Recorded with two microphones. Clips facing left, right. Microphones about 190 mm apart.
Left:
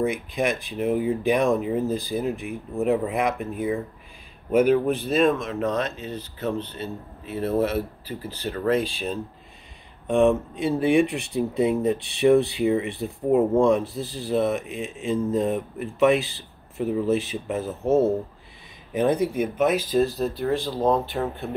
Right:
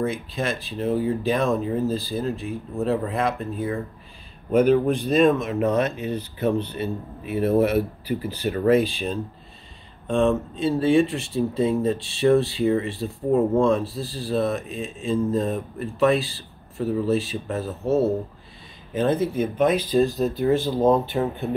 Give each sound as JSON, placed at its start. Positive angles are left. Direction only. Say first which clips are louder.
{"t": 0.0, "sound": "speech", "louder": "left 2 dB", "side_deg": 15}
{"t": 10.0, "sound": "speech", "louder": "left 1 dB", "side_deg": 15}
{"t": 18.9, "sound": "speech", "louder": "even", "side_deg": 15}